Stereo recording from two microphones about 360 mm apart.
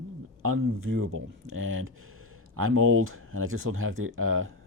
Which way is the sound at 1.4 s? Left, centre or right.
Right.